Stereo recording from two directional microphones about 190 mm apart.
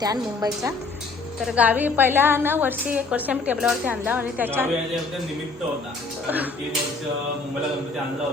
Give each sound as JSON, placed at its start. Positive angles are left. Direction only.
{"t": 0.0, "sound": "a woman's voice", "side_deg": -20}
{"t": 1.5, "sound": "a woman's voice", "side_deg": -10}
{"t": 6.2, "sound": "a woman's voice", "side_deg": -10}